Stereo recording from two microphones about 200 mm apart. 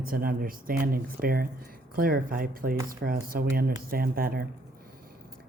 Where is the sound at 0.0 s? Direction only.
50° right (ahead or behind).